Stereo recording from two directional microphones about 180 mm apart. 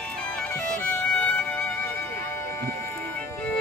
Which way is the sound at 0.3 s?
10° left (ahead or behind).